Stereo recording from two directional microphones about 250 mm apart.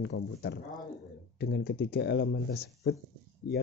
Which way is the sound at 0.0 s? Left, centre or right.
Left.